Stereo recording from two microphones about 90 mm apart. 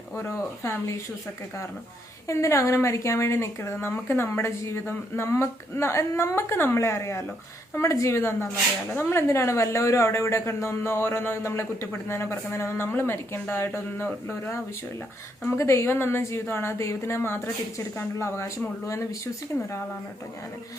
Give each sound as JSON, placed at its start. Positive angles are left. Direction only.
{"t": 0.2, "sound": "speech", "side_deg": 30}
{"t": 2.2, "sound": "speech", "side_deg": 35}